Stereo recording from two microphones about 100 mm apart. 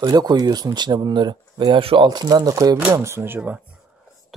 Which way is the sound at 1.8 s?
65° right (ahead or behind).